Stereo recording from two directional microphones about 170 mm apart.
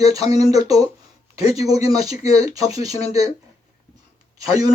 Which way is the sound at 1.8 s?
20° right (ahead or behind).